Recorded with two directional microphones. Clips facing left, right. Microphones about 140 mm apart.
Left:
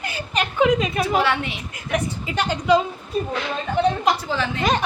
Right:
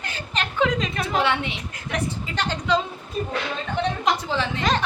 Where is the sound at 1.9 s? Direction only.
10° left (ahead or behind).